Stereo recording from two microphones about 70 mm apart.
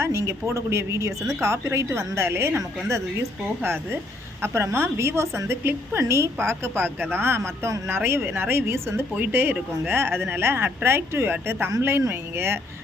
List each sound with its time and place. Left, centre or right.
0.0 s a woman's voice: right